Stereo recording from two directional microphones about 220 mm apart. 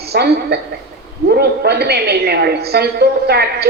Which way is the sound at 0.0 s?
45° right (ahead or behind).